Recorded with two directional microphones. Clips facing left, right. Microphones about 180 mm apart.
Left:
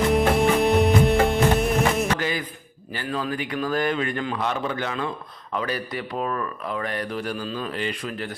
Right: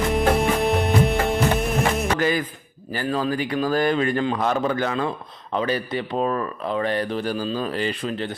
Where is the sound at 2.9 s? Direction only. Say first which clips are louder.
Right 4 dB; 35° right (ahead or behind).